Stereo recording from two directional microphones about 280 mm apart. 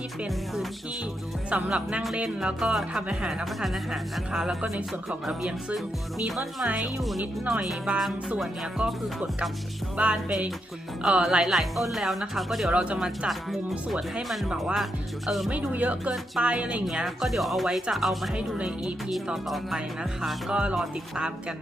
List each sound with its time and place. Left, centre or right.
0.2 s speech: centre
10.0 s speech: centre